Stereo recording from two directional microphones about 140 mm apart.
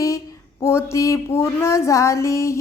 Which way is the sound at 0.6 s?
20° left (ahead or behind).